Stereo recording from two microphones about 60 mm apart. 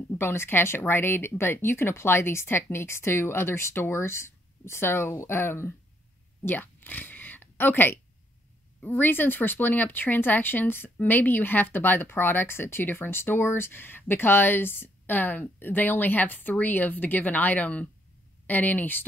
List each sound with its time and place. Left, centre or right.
0.2 s speech: left
6.4 s a sound: left
8.8 s speech: left